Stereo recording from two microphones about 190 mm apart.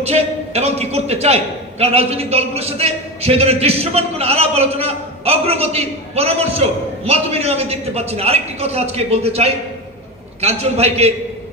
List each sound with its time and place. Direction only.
0.0 s a man's voice: 35° right (ahead or behind)